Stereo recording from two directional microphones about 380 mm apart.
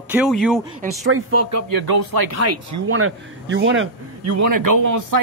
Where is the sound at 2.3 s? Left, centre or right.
Right.